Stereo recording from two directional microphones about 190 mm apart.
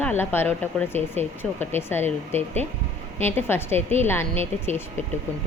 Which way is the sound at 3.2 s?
10° left (ahead or behind).